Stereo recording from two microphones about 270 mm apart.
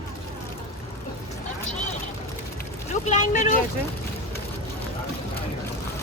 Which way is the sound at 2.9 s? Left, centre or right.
Left.